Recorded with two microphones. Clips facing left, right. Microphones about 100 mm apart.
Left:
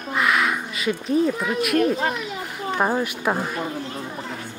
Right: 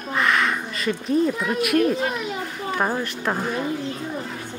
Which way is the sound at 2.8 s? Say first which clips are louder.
Left 3 dB; 10° left (ahead or behind).